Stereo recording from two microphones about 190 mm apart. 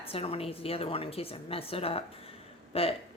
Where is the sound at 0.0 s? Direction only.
30° left (ahead or behind).